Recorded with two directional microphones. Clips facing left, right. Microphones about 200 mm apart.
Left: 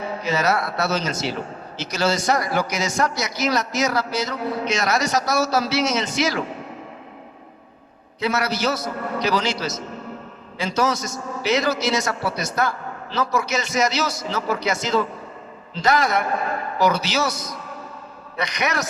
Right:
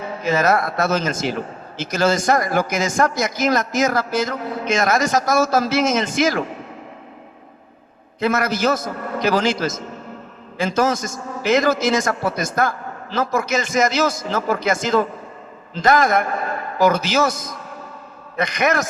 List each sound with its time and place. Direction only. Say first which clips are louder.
0.2 s a man's voice: right 5 dB; 50° right (ahead or behind)
8.2 s a man's voice: right 3 dB; 50° right (ahead or behind)